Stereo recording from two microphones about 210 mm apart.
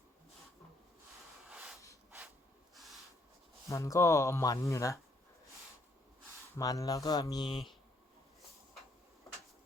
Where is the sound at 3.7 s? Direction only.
15° left (ahead or behind).